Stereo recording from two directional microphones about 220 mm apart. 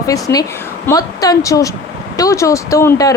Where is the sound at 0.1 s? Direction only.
15° left (ahead or behind).